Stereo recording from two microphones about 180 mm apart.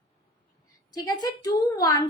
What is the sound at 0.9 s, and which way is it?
Speech, 20° left (ahead or behind).